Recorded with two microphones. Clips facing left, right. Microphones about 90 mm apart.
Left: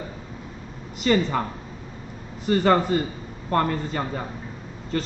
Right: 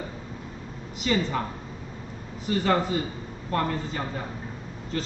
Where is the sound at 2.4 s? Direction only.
55° left (ahead or behind).